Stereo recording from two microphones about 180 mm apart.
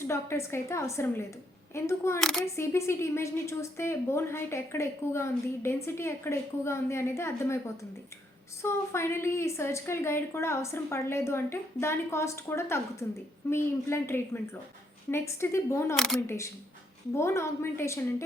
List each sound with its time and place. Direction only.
0.1 s a woman's voice: 15° left (ahead or behind)
8.6 s a woman's voice: 15° left (ahead or behind)